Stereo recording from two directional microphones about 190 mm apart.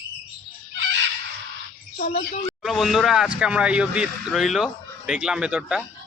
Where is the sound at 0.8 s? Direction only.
85° right.